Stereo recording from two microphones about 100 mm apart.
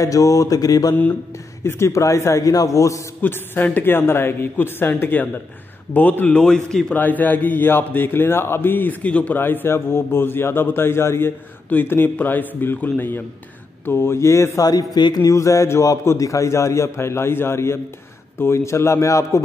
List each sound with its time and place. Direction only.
0.0 s a man's voice: 35° left (ahead or behind)
3.2 s speech: 20° left (ahead or behind)
7.0 s a man's voice: 15° left (ahead or behind); by 15.3 s 45° left (ahead or behind)
15.3 s speech: 30° left (ahead or behind)